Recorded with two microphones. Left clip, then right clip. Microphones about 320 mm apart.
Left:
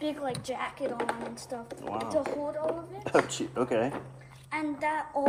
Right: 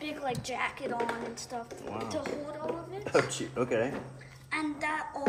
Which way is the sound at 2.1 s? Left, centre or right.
Centre.